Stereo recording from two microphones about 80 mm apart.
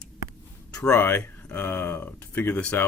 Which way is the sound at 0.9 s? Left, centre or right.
Left.